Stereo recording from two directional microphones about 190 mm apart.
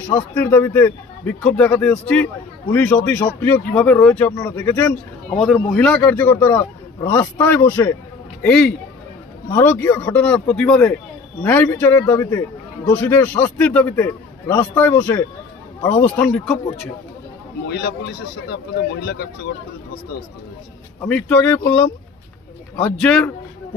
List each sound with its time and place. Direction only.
0.1 s a man's voice: 10° left (ahead or behind)
17.6 s speech: 60° left (ahead or behind)
21.0 s a man's voice: 10° left (ahead or behind)